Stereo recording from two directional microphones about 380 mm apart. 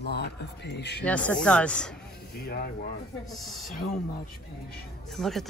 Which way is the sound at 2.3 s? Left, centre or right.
Left.